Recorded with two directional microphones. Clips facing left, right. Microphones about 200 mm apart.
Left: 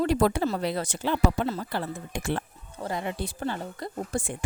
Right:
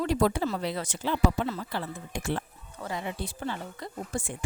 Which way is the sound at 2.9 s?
55° left (ahead or behind).